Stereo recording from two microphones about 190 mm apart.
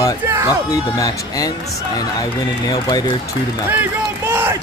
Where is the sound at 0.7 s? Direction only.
20° left (ahead or behind).